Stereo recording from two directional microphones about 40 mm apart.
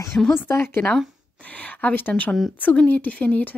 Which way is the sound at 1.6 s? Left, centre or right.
Left.